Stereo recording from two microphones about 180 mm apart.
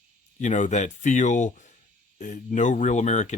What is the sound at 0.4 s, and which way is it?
Speech, 40° left (ahead or behind).